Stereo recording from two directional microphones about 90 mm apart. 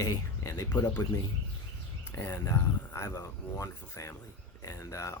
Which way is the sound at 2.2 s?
30° left (ahead or behind).